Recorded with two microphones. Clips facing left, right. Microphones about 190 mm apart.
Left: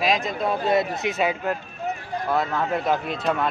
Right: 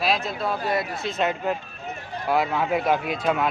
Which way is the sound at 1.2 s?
5° left (ahead or behind).